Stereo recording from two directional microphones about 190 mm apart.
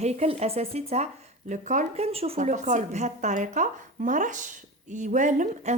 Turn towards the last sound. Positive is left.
turn(degrees=-40)  # may be behind; listen again after turning